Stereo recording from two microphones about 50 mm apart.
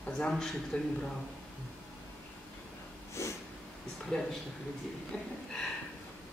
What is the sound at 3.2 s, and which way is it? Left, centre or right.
Snort, left.